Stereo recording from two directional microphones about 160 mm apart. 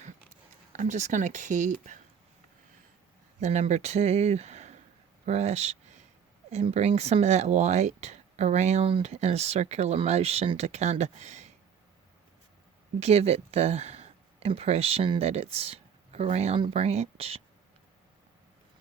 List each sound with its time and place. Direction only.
0.7 s speech: 50° right (ahead or behind)
3.4 s speech: 45° right (ahead or behind)
13.0 s speech: 40° right (ahead or behind)